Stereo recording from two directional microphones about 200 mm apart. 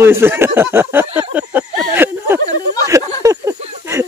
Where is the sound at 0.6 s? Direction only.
10° right (ahead or behind).